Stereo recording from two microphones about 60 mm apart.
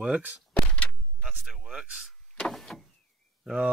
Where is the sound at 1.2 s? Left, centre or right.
Centre.